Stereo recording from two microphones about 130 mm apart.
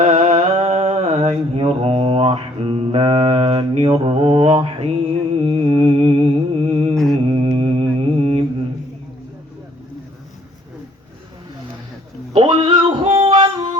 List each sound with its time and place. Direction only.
0.0 s music: 60° right (ahead or behind)
1.3 s music: 50° right (ahead or behind)
5.4 s a sound: 45° right (ahead or behind)
6.6 s mantra: 45° right (ahead or behind)
6.9 s mantra: centre (ahead or behind)
7.3 s mantra: 40° right (ahead or behind)
12.4 s music: 40° right (ahead or behind)